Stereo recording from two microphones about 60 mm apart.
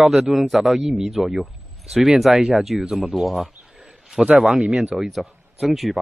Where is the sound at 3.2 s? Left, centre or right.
Centre.